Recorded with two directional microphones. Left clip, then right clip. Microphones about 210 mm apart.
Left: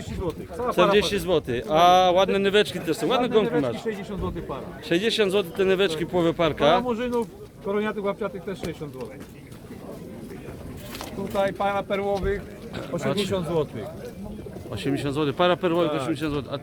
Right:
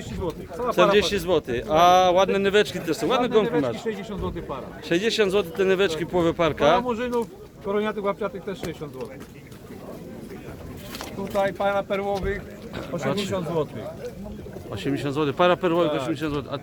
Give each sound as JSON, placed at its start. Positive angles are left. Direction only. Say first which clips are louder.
{"t": 0.3, "sound": "a man's voice", "louder": "right 1 dB", "side_deg": 0}
{"t": 3.8, "sound": "speech", "louder": "right 1 dB", "side_deg": 10}
{"t": 4.9, "sound": "a man's voice", "louder": "even", "side_deg": 0}
{"t": 6.8, "sound": "speech", "louder": "even", "side_deg": 15}
{"t": 11.3, "sound": "speech", "louder": "right 1 dB", "side_deg": 35}
{"t": 13.1, "sound": "speech", "louder": "left 1 dB", "side_deg": -10}
{"t": 13.3, "sound": "speech", "louder": "left 1 dB", "side_deg": 40}
{"t": 14.7, "sound": "a man's voice", "louder": "even", "side_deg": -5}